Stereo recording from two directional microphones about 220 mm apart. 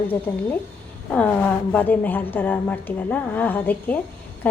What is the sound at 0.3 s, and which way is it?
A woman's voice, 5° left (ahead or behind).